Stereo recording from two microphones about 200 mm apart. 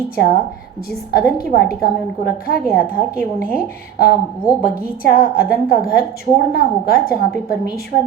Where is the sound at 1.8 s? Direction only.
50° left (ahead or behind).